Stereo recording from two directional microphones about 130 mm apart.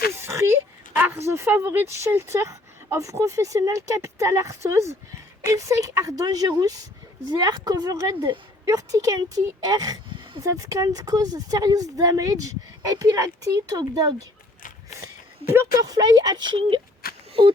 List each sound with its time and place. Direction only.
0.1 s a sound: 20° right (ahead or behind)
1.3 s speech: 20° right (ahead or behind)
15.8 s speech: 30° right (ahead or behind)